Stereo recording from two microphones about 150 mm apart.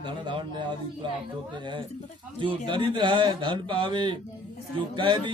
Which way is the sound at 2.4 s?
35° right (ahead or behind).